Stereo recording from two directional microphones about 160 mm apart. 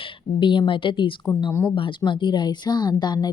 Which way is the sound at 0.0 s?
30° left (ahead or behind).